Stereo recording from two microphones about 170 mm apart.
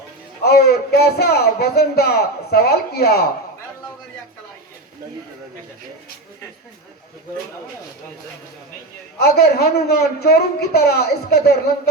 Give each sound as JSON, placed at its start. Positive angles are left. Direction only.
{"t": 0.4, "sound": "speech", "side_deg": 70}
{"t": 9.1, "sound": "speech", "side_deg": 70}